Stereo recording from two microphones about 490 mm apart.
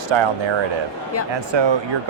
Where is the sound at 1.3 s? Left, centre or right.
Right.